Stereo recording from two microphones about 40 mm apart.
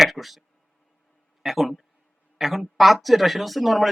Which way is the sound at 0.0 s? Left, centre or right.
Centre.